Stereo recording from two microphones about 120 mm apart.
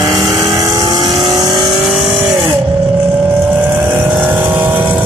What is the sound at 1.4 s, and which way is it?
Vehicle, 35° right (ahead or behind).